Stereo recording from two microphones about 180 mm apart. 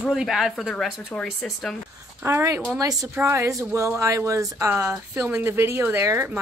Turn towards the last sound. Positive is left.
turn(degrees=-15)  # may be behind; listen again after turning